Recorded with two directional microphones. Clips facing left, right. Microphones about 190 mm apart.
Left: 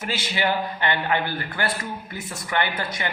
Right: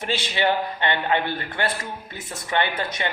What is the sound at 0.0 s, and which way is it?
Speech, 25° right (ahead or behind).